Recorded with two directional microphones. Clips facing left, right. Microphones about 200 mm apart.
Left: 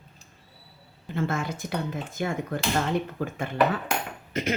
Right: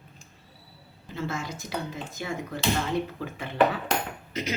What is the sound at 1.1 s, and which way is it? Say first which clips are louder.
Speech: left 4 dB; 55° left (ahead or behind).